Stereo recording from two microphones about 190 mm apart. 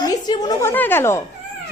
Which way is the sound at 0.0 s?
20° left (ahead or behind).